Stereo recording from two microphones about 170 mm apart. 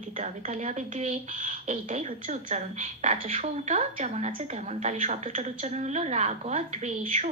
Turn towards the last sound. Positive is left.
turn(degrees=-40)  # may be behind; listen again after turning